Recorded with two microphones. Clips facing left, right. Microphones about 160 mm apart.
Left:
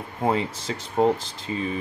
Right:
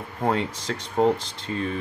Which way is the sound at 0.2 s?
Centre (ahead or behind).